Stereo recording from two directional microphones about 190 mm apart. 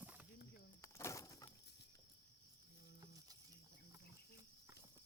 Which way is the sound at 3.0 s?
20° right (ahead or behind).